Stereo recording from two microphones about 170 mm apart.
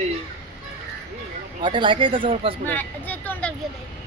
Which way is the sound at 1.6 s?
30° right (ahead or behind).